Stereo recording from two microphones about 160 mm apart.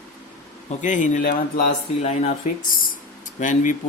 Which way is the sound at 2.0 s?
45° left (ahead or behind).